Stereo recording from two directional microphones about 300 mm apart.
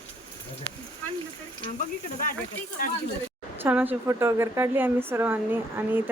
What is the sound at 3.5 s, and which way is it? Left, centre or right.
Speech, centre.